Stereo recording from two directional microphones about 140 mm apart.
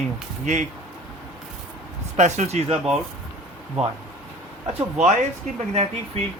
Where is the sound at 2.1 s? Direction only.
55° right (ahead or behind).